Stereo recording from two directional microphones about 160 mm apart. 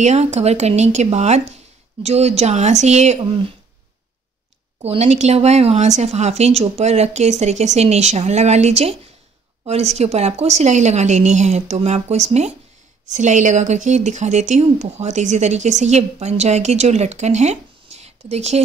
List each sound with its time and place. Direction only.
0.0 s speech: 45° right (ahead or behind)
4.8 s speech: 40° right (ahead or behind)